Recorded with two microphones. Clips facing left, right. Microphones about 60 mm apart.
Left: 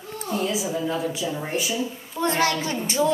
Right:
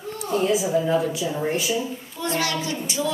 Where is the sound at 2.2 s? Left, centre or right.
Left.